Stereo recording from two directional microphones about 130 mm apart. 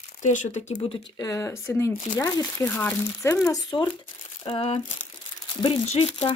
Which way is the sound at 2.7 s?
15° left (ahead or behind).